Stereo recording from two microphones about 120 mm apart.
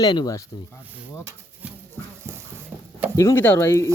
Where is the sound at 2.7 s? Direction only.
15° right (ahead or behind).